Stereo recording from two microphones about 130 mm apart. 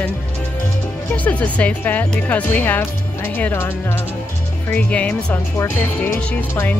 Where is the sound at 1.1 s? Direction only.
10° left (ahead or behind).